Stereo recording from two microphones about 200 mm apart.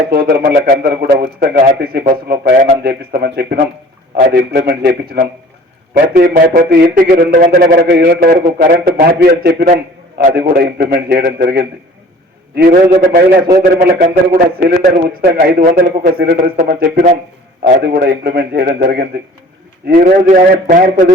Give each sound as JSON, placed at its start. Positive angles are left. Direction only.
{"t": 0.1, "sound": "a man's voice", "side_deg": -50}